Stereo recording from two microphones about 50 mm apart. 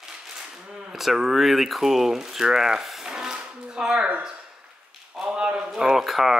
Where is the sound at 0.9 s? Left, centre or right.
Centre.